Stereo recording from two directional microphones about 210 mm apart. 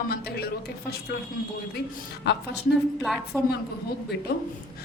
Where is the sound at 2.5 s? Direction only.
Centre (ahead or behind).